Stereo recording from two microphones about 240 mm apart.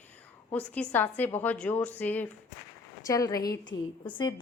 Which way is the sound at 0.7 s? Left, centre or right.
Centre.